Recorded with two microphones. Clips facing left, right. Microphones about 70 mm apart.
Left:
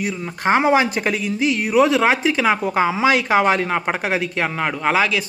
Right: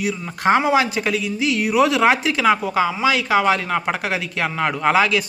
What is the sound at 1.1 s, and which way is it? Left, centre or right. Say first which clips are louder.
Speech: left 1 dB; left.